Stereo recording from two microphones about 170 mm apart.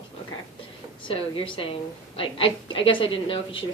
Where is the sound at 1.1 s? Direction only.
30° left (ahead or behind).